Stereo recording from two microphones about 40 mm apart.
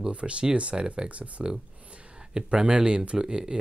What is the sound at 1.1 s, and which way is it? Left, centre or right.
Speech, right.